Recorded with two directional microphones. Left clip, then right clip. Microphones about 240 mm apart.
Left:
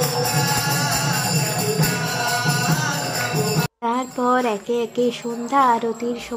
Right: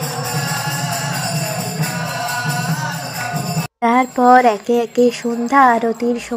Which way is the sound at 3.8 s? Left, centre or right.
Right.